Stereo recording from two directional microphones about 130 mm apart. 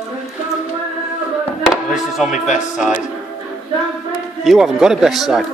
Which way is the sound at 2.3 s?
75° left (ahead or behind).